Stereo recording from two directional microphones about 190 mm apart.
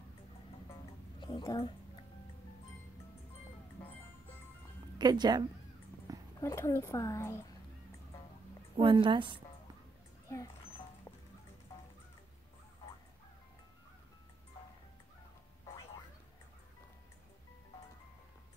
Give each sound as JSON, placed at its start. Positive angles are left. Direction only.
{"t": 1.2, "sound": "speech", "side_deg": 20}
{"t": 4.9, "sound": "speech", "side_deg": -20}
{"t": 6.1, "sound": "a sound", "side_deg": -20}
{"t": 6.4, "sound": "speech", "side_deg": 15}
{"t": 8.7, "sound": "a woman's voice", "side_deg": -25}
{"t": 10.2, "sound": "mouse", "side_deg": 15}